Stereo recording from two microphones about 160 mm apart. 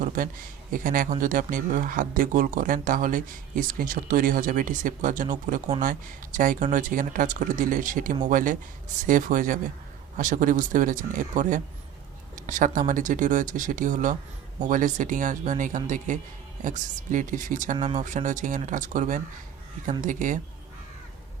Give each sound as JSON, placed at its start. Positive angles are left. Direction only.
{"t": 0.7, "sound": "speech", "side_deg": -60}